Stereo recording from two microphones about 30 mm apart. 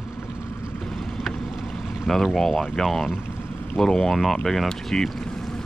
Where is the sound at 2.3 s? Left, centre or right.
Left.